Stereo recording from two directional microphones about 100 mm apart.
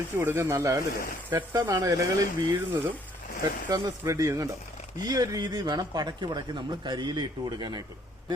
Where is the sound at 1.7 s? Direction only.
40° right (ahead or behind).